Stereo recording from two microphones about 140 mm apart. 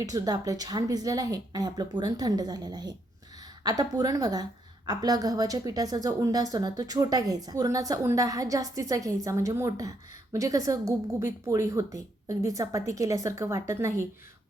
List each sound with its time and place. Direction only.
0.0 s a woman's voice: 25° right (ahead or behind)